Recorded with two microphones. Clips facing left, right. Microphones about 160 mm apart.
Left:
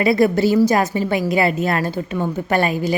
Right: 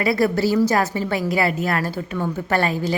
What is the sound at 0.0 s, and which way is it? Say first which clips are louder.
A woman's voice: left 4 dB; 20° left (ahead or behind).